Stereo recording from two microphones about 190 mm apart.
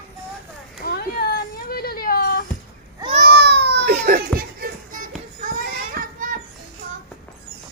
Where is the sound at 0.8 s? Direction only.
55° left (ahead or behind).